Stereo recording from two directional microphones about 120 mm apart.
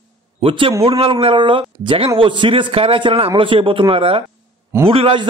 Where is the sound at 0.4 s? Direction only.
50° right (ahead or behind).